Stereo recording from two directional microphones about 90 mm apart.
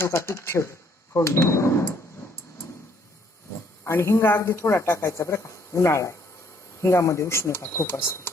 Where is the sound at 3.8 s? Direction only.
25° left (ahead or behind).